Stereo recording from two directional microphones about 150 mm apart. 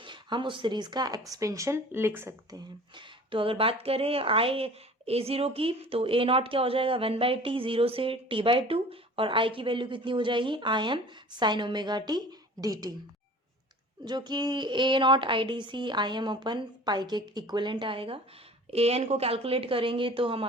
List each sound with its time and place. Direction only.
0.0 s speech: 30° right (ahead or behind); by 2.6 s 15° right (ahead or behind)
2.9 s speech: 35° right (ahead or behind)
14.0 s speech: 30° right (ahead or behind)